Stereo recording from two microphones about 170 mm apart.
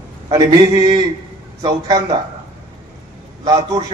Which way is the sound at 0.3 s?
25° right (ahead or behind).